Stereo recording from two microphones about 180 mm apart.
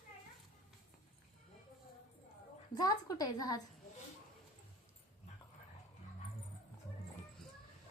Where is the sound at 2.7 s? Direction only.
20° left (ahead or behind).